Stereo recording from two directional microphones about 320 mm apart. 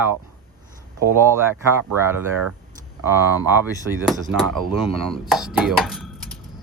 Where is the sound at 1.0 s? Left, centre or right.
Centre.